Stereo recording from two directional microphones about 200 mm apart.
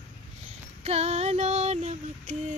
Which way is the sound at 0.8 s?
30° right (ahead or behind).